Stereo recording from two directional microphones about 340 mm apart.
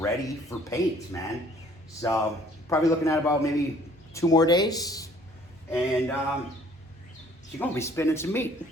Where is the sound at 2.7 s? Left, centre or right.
Centre.